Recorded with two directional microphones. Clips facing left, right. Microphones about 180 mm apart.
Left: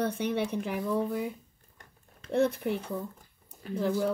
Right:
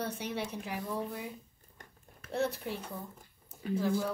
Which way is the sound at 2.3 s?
60° left (ahead or behind).